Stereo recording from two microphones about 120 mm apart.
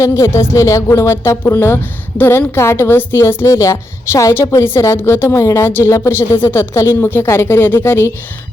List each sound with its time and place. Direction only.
0.0 s a woman's voice: 25° left (ahead or behind)